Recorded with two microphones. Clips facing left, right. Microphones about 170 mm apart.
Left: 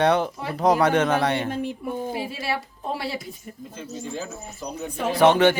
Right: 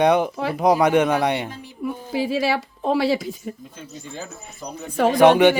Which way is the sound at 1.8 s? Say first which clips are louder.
Right 3 dB; 90° right.